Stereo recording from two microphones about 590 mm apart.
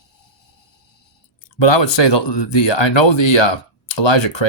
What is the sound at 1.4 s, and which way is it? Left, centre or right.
Speech, left.